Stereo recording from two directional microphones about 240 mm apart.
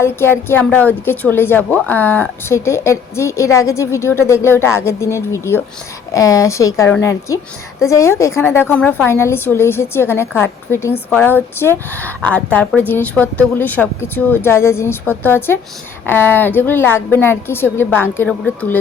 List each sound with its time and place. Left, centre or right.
0.0 s a woman's voice: centre